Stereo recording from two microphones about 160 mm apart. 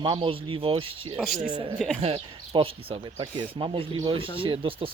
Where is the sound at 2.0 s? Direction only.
35° right (ahead or behind).